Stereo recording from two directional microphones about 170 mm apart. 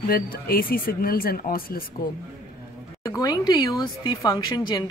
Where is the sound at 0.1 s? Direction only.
60° left (ahead or behind).